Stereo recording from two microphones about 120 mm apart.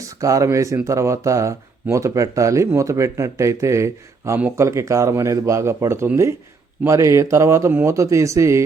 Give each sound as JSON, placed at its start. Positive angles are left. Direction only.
{"t": 0.0, "sound": "speech", "side_deg": -25}